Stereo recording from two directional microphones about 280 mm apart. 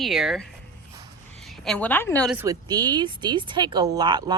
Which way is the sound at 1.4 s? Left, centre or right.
Centre.